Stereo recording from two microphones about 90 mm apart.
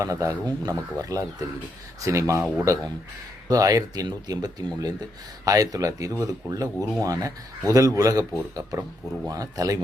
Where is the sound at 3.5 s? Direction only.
40° right (ahead or behind).